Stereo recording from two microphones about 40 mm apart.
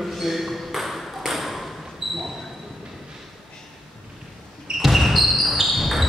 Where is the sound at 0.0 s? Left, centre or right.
Centre.